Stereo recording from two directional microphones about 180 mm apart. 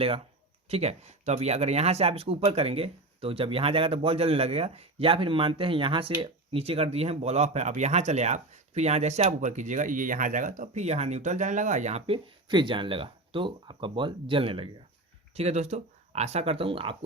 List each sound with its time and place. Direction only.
0.7 s speech: 35° right (ahead or behind)